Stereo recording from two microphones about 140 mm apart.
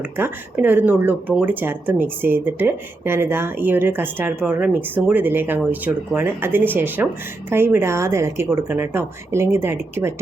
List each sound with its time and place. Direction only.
0.2 s speech: 15° right (ahead or behind)